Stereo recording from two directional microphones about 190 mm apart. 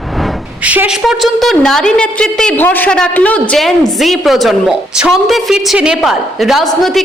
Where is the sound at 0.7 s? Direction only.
5° right (ahead or behind).